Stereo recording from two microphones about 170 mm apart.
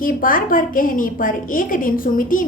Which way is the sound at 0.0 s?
55° left (ahead or behind).